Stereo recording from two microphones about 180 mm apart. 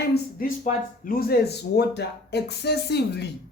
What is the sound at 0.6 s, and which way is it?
Speech, 50° left (ahead or behind).